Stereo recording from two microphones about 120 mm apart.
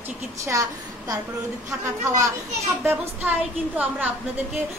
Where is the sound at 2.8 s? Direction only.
20° right (ahead or behind).